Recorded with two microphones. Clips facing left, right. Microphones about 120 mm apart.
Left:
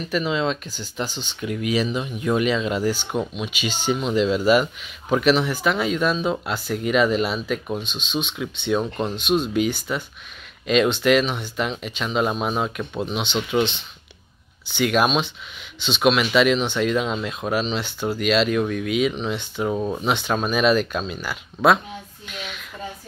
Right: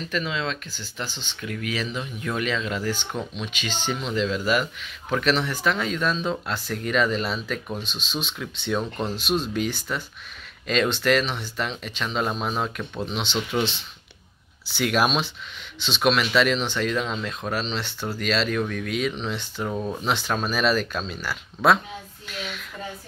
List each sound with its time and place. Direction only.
0.0 s speech: 15° left (ahead or behind)
5.1 s speech: 5° left (ahead or behind)
7.8 s speech: centre (ahead or behind); by 20.1 s 15° left (ahead or behind)
20.1 s speech: centre (ahead or behind)
22.3 s a sound: centre (ahead or behind)